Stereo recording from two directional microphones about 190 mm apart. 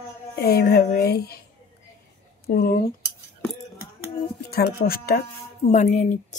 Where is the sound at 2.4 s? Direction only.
50° left (ahead or behind).